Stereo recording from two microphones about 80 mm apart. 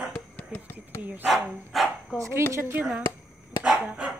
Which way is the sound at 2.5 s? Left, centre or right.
Right.